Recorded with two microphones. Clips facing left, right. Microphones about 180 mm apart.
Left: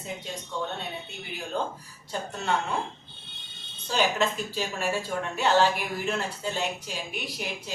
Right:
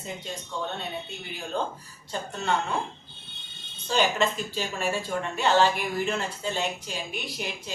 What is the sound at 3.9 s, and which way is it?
Speech, 5° left (ahead or behind).